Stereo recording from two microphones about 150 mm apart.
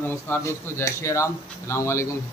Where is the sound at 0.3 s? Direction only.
15° left (ahead or behind).